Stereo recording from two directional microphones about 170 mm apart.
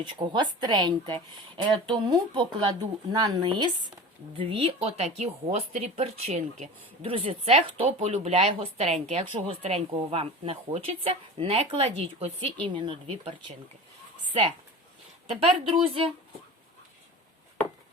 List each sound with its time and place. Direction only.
0.0 s speech: 30° right (ahead or behind)
15.4 s speech: 35° right (ahead or behind)